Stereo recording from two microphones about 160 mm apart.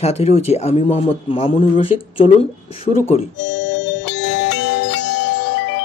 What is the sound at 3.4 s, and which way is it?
Music, 90° left.